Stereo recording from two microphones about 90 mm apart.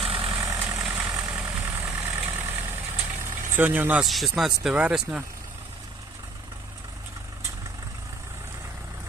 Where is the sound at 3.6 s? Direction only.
20° right (ahead or behind).